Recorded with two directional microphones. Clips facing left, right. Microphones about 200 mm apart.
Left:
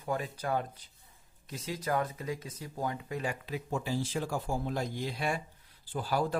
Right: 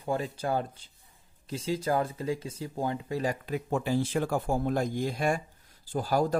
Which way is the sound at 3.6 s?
60° right (ahead or behind).